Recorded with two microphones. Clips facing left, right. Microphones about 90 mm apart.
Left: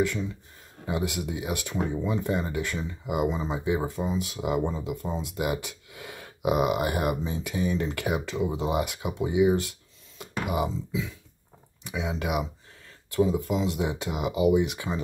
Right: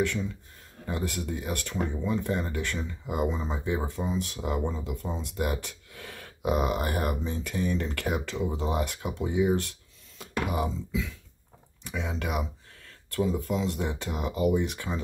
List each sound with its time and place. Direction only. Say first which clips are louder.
0.0 s speech: left 2 dB; centre (ahead or behind)
10.9 s speech: left 1 dB; 15° left (ahead or behind)
11.8 s speech: left 2 dB; 5° left (ahead or behind)